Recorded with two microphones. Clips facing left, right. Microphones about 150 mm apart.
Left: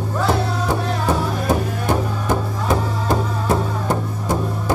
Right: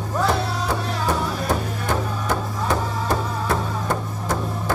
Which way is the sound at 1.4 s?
20° left (ahead or behind).